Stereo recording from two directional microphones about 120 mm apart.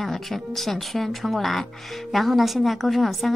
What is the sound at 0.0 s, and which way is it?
Speech, centre (ahead or behind).